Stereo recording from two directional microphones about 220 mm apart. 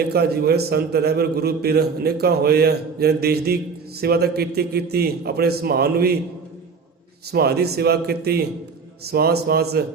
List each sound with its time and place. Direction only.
0.1 s a man's voice: 45° right (ahead or behind)
7.3 s a man's voice: 45° right (ahead or behind)